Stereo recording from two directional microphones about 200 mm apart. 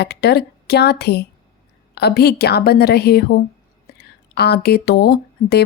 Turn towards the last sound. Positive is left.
turn(degrees=50)  # may be behind; listen again after turning